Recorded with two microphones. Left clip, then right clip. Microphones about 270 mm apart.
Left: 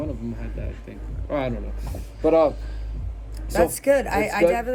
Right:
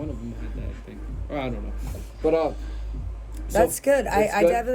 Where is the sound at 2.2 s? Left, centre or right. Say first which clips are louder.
Left 4 dB; centre.